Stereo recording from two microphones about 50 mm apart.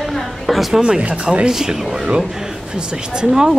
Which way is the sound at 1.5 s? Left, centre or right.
Centre.